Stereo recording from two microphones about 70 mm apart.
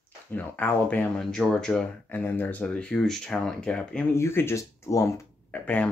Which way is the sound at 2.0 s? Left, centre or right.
Left.